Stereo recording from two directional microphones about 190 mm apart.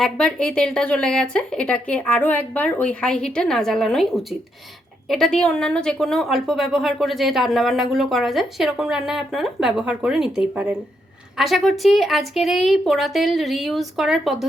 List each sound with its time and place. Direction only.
0.0 s a woman's voice: 5° left (ahead or behind)